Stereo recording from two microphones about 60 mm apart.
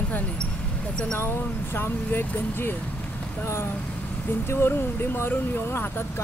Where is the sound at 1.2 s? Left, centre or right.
Left.